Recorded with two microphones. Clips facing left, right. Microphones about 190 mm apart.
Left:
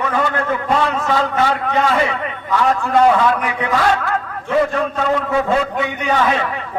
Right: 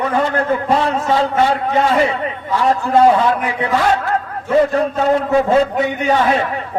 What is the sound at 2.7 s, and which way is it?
A man's voice, 30° right (ahead or behind).